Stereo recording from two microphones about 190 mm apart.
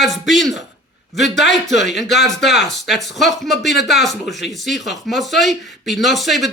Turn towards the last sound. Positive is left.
turn(degrees=0)  # may be behind; listen again after turning